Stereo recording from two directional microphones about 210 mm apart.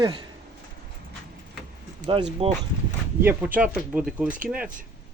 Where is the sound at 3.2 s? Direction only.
10° right (ahead or behind).